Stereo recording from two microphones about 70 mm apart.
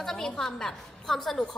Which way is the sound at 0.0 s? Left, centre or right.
Centre.